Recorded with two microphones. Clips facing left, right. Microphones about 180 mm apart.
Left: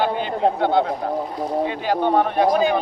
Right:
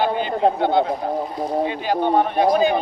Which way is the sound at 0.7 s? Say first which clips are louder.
Even; 10° right (ahead or behind).